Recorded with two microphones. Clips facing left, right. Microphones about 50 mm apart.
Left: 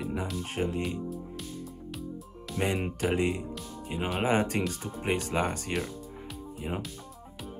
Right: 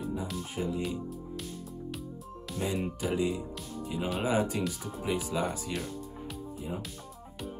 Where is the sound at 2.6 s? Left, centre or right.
Left.